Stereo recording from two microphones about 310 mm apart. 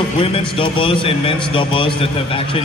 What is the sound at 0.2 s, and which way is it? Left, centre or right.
A man's voice, centre.